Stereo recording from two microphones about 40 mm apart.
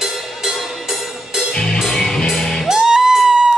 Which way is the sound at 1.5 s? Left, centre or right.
Centre.